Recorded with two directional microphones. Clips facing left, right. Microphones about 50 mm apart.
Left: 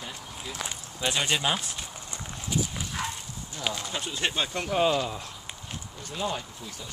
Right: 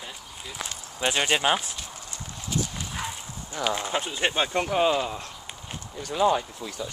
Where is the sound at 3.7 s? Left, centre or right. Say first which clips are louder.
Right 5 dB; right.